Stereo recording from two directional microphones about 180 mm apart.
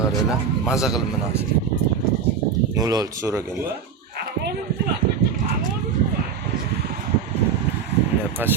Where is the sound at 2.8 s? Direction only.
20° right (ahead or behind).